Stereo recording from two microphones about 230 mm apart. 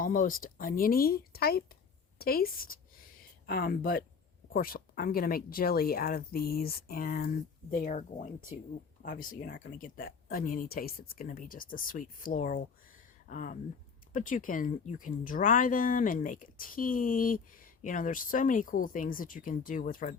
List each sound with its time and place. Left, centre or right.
0.0 s speech: left